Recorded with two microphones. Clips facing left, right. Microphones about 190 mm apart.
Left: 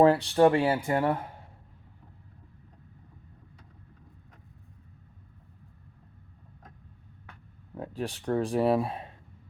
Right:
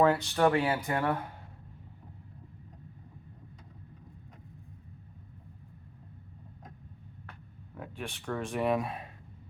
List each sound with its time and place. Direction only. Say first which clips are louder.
0.0 s speech: left 5 dB; 35° left (ahead or behind)
7.8 s a man's voice: left 6 dB; 35° left (ahead or behind)